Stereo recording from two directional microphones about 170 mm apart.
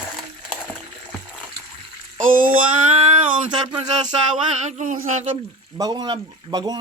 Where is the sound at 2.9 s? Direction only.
40° right (ahead or behind).